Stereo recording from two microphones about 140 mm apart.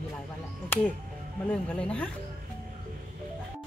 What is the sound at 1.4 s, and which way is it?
Speech, 10° left (ahead or behind).